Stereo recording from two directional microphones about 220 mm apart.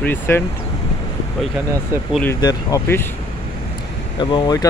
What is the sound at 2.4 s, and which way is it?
Speech, 15° left (ahead or behind).